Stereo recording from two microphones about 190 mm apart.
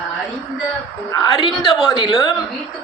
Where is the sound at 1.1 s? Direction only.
20° left (ahead or behind).